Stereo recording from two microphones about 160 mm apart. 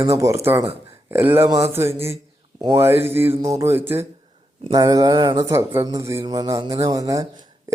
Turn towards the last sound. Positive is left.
turn(degrees=-20)  # may be behind; listen again after turning